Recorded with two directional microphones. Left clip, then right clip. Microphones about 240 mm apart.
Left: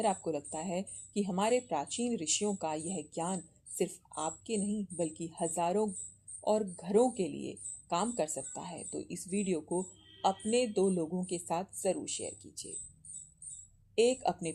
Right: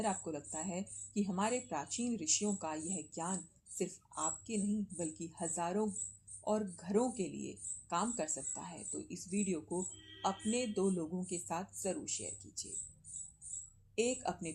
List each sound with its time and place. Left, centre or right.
0.0 s speech: left
13.9 s speech: left